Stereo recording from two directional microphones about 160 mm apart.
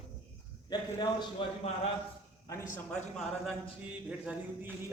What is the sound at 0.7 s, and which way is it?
Speech, 30° left (ahead or behind).